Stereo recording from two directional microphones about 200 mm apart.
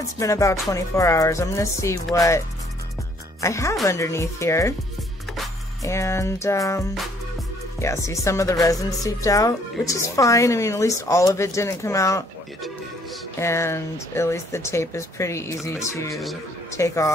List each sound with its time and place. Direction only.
0.2 s a woman's voice: 15° left (ahead or behind)
5.9 s speech: 15° left (ahead or behind)
13.4 s speech: 15° left (ahead or behind)
16.1 s speech: centre (ahead or behind)
16.7 s speech: 15° left (ahead or behind)